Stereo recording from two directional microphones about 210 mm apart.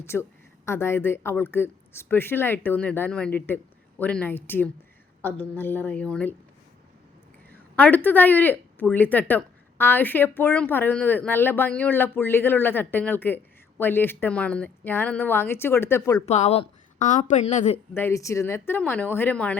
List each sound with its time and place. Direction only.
0.0 s speech: 10° left (ahead or behind)
7.5 s speech: 10° left (ahead or behind)
16.2 s speech: 30° left (ahead or behind)
17.9 s speech: 15° left (ahead or behind)